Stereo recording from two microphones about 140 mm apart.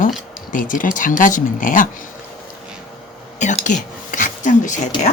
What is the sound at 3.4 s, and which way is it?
A woman's voice, 60° left (ahead or behind).